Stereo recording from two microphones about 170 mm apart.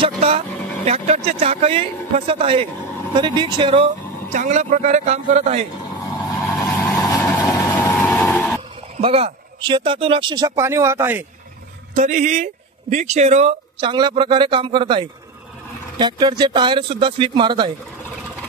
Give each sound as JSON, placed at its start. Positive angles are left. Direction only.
{"t": 0.0, "sound": "vehicle", "side_deg": -35}
{"t": 0.8, "sound": "speech", "side_deg": -40}
{"t": 4.3, "sound": "a man's voice", "side_deg": -45}
{"t": 6.6, "sound": "vehicle", "side_deg": 15}
{"t": 9.0, "sound": "speech", "side_deg": -35}
{"t": 11.9, "sound": "a man's voice", "side_deg": -45}